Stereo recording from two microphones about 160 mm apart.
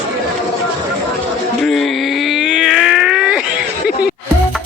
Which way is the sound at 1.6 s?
Centre (ahead or behind).